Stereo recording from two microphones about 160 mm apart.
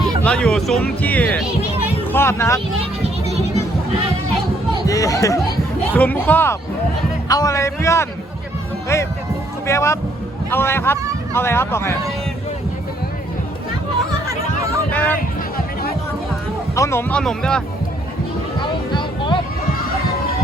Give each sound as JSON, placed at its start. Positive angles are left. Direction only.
{"t": 0.3, "sound": "speech", "side_deg": 5}
{"t": 3.2, "sound": "music", "side_deg": -40}
{"t": 4.9, "sound": "speech", "side_deg": 20}
{"t": 14.8, "sound": "a sound", "side_deg": 10}
{"t": 15.5, "sound": "music", "side_deg": 70}
{"t": 16.7, "sound": "speech", "side_deg": 20}
{"t": 18.6, "sound": "music", "side_deg": 30}